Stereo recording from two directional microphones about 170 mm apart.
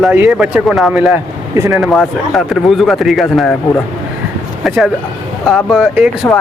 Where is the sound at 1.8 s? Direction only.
Centre (ahead or behind).